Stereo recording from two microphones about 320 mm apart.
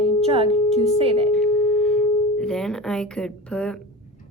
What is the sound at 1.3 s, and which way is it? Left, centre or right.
Music, centre.